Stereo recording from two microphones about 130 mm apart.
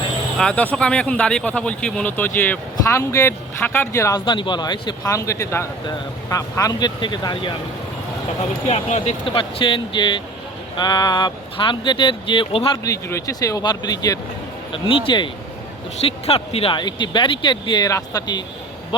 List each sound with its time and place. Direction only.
0.3 s speech: 10° left (ahead or behind)
4.3 s speech: 35° left (ahead or behind)
8.6 s speech: 60° left (ahead or behind)
9.3 s speech: 40° left (ahead or behind)
12.7 s speech: 25° left (ahead or behind)
14.7 s speech: 40° left (ahead or behind)
16.0 s speech: 50° left (ahead or behind); by 18.4 s 30° left (ahead or behind)